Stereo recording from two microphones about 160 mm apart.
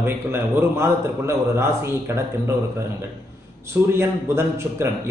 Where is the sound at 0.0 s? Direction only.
15° right (ahead or behind).